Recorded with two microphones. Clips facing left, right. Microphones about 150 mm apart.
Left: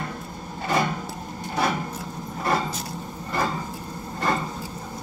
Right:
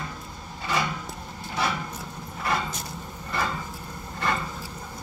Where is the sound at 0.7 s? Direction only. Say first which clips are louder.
Left 4 dB; 45° left (ahead or behind).